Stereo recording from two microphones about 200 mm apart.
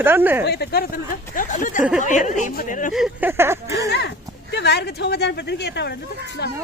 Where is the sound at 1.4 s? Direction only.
40° left (ahead or behind).